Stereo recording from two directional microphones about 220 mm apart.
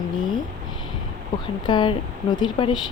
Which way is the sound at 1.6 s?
20° left (ahead or behind).